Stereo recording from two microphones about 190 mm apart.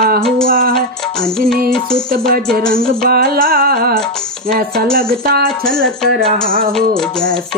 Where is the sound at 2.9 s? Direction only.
55° right (ahead or behind).